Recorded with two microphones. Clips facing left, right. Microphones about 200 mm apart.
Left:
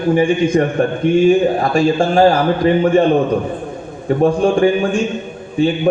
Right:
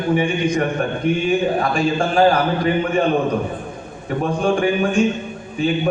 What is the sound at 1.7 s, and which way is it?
Speech, 30° left (ahead or behind).